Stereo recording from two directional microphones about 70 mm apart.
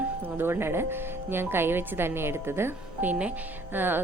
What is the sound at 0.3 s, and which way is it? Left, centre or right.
A woman's voice, right.